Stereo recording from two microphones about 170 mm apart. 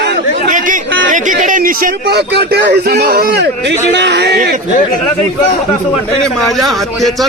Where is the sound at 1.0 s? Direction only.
50° right (ahead or behind); by 4.5 s 85° right.